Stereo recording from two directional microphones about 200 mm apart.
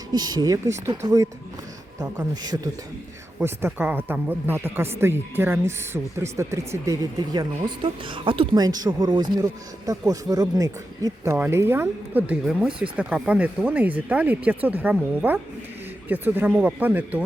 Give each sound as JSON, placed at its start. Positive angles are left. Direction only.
{"t": 0.1, "sound": "speech", "side_deg": -20}